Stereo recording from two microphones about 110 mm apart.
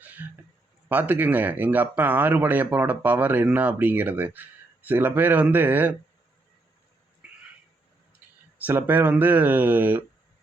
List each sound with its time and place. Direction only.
0.0 s a sound: 15° right (ahead or behind)
0.9 s speech: 15° right (ahead or behind)
8.6 s speech: 15° right (ahead or behind)